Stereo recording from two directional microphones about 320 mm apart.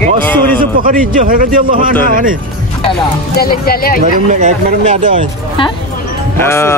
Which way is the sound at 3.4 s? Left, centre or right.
Left.